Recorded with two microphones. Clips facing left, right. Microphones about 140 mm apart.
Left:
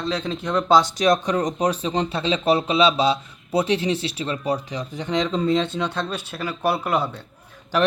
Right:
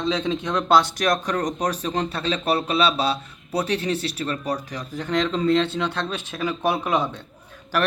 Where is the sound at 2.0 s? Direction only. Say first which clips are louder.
Left 3 dB; 20° left (ahead or behind).